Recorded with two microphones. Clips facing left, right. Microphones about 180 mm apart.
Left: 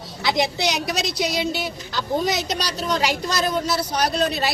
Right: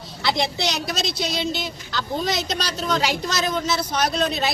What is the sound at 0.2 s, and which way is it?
Speech, 10° left (ahead or behind).